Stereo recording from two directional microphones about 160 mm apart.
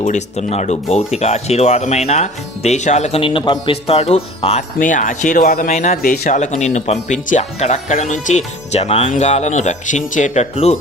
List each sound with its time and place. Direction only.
0.0 s speech: 45° left (ahead or behind)
4.8 s speech: 55° left (ahead or behind)